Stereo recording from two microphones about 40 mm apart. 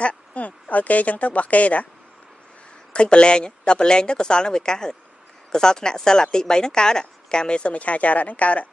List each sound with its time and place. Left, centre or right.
0.0 s speech: left
2.9 s speech: left